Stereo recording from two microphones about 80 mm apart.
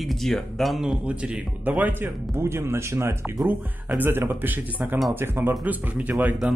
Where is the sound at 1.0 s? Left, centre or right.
Centre; by 3.4 s right.